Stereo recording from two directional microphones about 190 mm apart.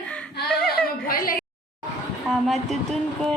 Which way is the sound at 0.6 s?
50° left (ahead or behind).